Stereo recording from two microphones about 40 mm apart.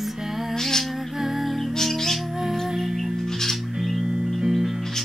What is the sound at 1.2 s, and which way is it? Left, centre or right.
Music, centre.